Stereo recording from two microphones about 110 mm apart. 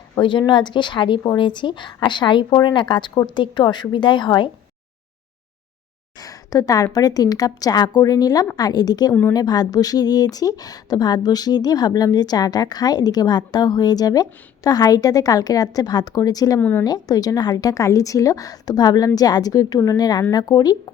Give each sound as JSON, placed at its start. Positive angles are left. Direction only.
{"t": 0.2, "sound": "a woman's voice", "side_deg": 45}
{"t": 6.1, "sound": "a sound", "side_deg": 35}
{"t": 6.9, "sound": "a woman's voice", "side_deg": 35}
{"t": 16.6, "sound": "a woman's voice", "side_deg": 15}
{"t": 16.8, "sound": "a woman's voice", "side_deg": 35}